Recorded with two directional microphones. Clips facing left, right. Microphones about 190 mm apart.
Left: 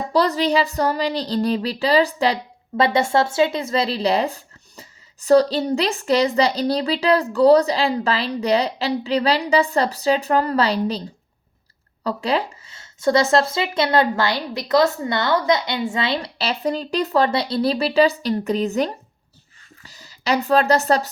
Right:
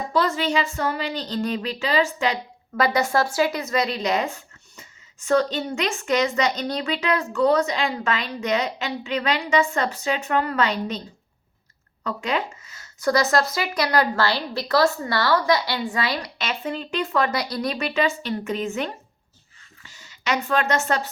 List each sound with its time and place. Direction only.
0.1 s speech: 35° left (ahead or behind)
12.0 s speech: 35° left (ahead or behind)